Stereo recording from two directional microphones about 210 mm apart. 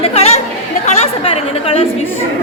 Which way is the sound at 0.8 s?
30° left (ahead or behind).